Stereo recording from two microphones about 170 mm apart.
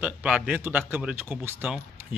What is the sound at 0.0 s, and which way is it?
Speech, 5° right (ahead or behind).